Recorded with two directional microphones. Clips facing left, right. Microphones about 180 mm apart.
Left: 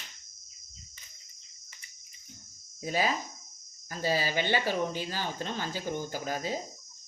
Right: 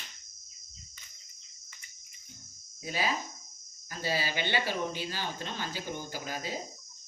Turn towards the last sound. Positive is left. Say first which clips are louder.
# left 4 dB
turn(degrees=45)  # may be behind; listen again after turning